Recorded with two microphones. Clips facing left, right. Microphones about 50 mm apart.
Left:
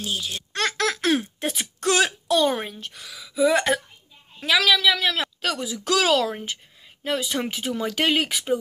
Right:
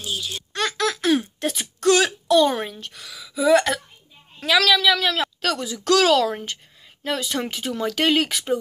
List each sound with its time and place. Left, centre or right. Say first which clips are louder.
0.0 s a child's voice: even; left
0.5 s a sound: right 1 dB; left
1.6 s a woman's voice: right 3 dB; left